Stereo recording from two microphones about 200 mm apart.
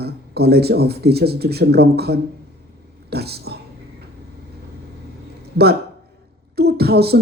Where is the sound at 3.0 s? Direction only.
55° right (ahead or behind).